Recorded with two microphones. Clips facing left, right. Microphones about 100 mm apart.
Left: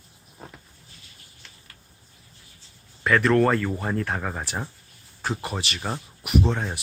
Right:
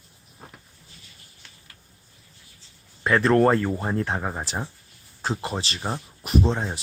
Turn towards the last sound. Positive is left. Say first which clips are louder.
# right 1 dB
turn(degrees=-25)  # may be behind; listen again after turning